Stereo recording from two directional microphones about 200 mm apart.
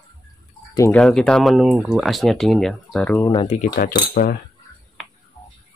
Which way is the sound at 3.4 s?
35° left (ahead or behind).